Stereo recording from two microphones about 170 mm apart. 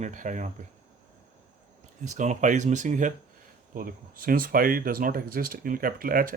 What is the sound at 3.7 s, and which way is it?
Speech, 55° right (ahead or behind).